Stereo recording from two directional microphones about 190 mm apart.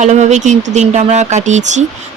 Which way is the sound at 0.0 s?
40° right (ahead or behind).